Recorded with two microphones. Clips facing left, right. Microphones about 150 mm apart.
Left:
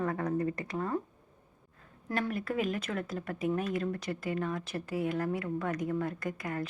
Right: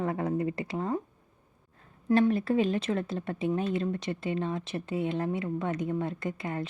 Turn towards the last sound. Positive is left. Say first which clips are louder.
# right 2 dB
turn(degrees=-25)  # may be behind; listen again after turning